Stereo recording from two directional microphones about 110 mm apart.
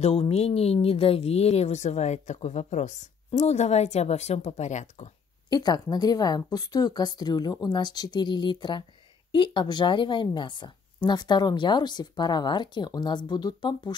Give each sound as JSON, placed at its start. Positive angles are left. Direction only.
{"t": 0.0, "sound": "speech", "side_deg": 65}
{"t": 5.5, "sound": "a woman's voice", "side_deg": 40}